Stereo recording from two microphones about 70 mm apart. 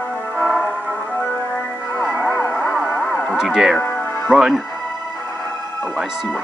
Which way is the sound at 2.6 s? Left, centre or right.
Centre.